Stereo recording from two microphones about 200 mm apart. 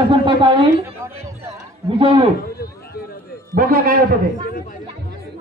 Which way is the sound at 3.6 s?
45° right (ahead or behind).